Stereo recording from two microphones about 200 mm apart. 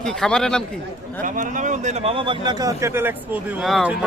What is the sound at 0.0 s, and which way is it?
Speech, 5° left (ahead or behind).